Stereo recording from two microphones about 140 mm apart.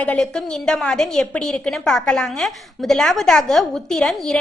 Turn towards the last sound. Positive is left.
turn(degrees=5)  # may be behind; listen again after turning